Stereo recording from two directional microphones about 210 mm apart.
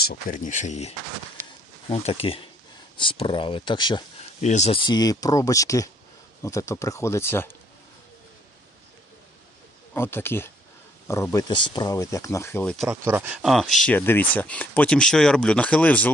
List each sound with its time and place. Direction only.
0.0 s speech: 45° left (ahead or behind); by 4.0 s 20° left (ahead or behind)
4.4 s speech: 35° left (ahead or behind); by 7.5 s 10° left (ahead or behind)
9.9 s speech: 10° left (ahead or behind)